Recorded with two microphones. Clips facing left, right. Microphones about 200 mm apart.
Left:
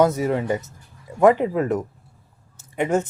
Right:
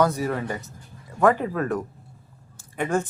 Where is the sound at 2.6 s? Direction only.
20° left (ahead or behind).